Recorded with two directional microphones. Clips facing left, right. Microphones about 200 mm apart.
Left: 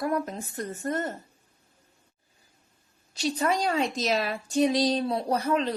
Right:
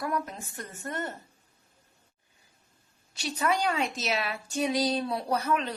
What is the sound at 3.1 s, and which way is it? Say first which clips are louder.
A child's voice: left 3 dB; 35° left (ahead or behind).